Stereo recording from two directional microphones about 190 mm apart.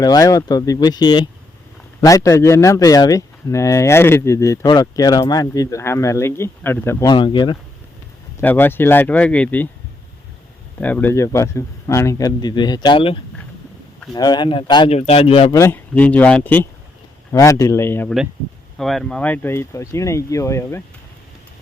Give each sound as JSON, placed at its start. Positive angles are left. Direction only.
{"t": 0.0, "sound": "speech", "side_deg": 20}
{"t": 7.1, "sound": "speech", "side_deg": 25}
{"t": 8.4, "sound": "speech", "side_deg": 10}
{"t": 10.8, "sound": "a man's voice", "side_deg": 10}
{"t": 15.5, "sound": "speech", "side_deg": 15}
{"t": 18.8, "sound": "speech", "side_deg": 0}